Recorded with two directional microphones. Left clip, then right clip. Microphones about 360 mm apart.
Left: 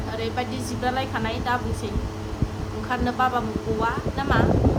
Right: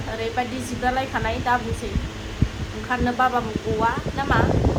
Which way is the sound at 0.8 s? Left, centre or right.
Centre.